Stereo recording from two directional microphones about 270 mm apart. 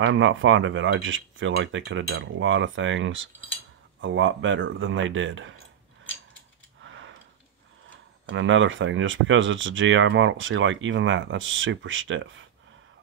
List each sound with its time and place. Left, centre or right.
0.0 s speech: right
6.8 s a sound: right
8.3 s speech: right